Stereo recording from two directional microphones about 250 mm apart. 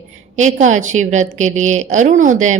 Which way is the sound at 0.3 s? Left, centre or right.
Right.